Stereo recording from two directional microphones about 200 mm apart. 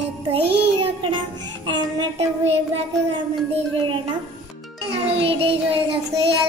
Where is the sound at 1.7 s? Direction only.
30° right (ahead or behind).